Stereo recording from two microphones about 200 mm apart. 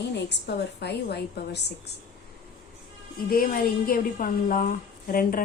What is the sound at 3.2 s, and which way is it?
A woman's voice, 45° left (ahead or behind).